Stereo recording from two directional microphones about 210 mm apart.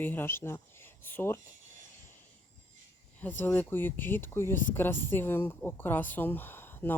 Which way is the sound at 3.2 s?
10° left (ahead or behind).